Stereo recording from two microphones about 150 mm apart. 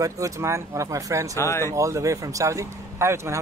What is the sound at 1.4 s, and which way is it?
Speech, 20° left (ahead or behind).